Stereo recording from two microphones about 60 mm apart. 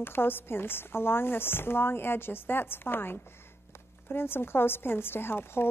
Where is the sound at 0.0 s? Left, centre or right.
Left.